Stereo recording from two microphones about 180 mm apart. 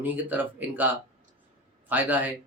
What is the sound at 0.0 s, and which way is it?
Speech, 10° right (ahead or behind).